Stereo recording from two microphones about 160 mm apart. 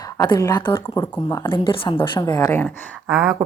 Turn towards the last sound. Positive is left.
turn(degrees=-5)  # may be behind; listen again after turning